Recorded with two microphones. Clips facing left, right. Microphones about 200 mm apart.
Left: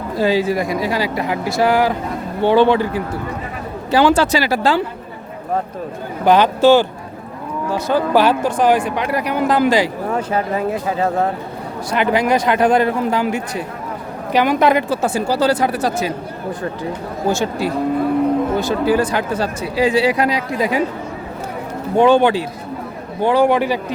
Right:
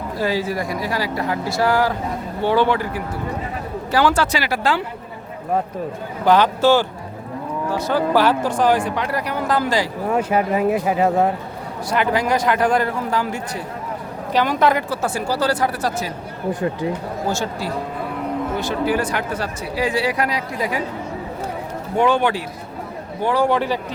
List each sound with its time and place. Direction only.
0.2 s speech: 20° left (ahead or behind)
6.2 s speech: 20° left (ahead or behind)
10.1 s speech: 10° right (ahead or behind)
11.9 s speech: 20° left (ahead or behind)
17.2 s speech: 20° left (ahead or behind)
18.7 s speech: 35° left (ahead or behind)
21.9 s speech: 30° left (ahead or behind); by 23.8 s 10° left (ahead or behind)